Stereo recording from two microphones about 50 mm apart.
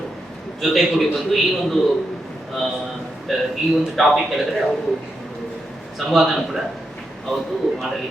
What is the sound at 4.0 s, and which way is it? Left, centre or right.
Speech, centre.